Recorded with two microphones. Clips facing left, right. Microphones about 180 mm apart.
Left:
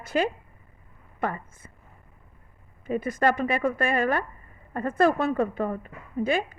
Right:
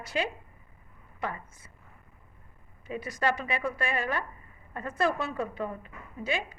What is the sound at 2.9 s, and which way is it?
A woman's voice, 50° left (ahead or behind).